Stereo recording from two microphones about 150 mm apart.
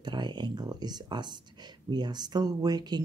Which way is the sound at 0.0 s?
30° right (ahead or behind).